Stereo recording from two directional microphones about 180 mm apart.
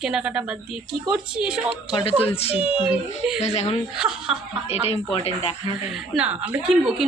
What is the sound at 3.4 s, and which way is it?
Speech, 35° left (ahead or behind).